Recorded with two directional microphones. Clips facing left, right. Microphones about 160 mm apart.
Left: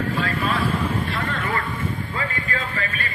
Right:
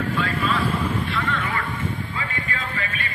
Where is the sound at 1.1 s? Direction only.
40° left (ahead or behind).